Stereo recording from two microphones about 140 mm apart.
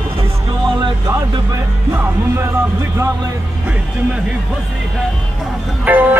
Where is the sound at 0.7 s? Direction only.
35° right (ahead or behind).